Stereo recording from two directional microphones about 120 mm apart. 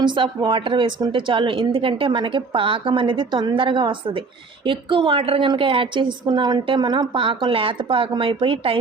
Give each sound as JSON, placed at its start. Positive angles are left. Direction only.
{"t": 0.0, "sound": "a woman's voice", "side_deg": -40}